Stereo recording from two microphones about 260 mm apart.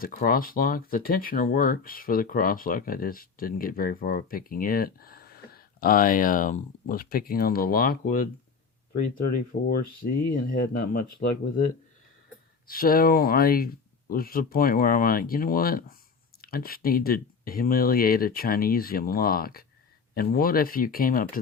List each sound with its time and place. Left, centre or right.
0.0 s speech: left
9.5 s speech: left
12.6 s speech: left